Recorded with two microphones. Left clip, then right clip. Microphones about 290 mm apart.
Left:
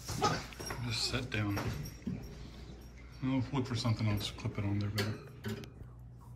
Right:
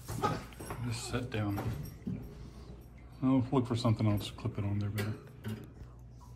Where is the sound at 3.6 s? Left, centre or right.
Centre.